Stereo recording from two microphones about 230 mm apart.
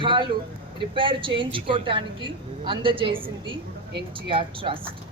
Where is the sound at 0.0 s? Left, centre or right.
Right.